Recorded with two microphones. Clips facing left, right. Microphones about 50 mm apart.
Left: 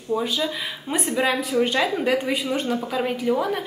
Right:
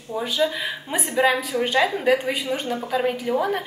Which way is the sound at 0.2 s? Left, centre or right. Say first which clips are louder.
Right 2 dB; centre.